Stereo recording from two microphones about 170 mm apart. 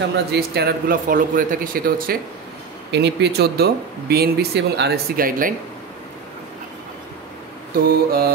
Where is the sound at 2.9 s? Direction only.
85° right; by 5.5 s 60° right (ahead or behind).